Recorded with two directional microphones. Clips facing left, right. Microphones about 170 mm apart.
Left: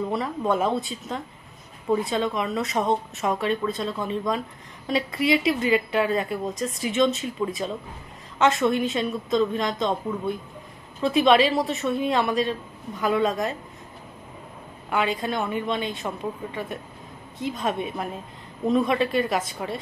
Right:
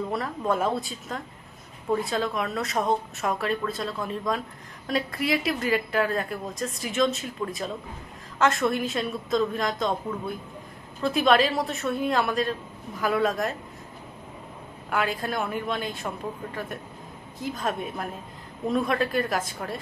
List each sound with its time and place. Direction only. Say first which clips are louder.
0.1 s a woman's voice: left 1 dB; centre (ahead or behind)
14.9 s a woman's voice: left 2 dB; centre (ahead or behind)